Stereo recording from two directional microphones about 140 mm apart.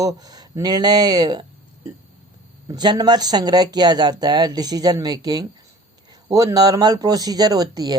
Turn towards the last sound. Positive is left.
turn(degrees=-25)  # may be behind; listen again after turning